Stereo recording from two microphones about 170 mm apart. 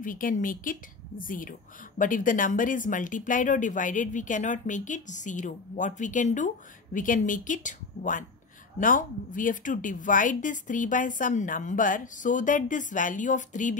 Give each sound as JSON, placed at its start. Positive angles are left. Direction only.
{"t": 0.0, "sound": "speech", "side_deg": 55}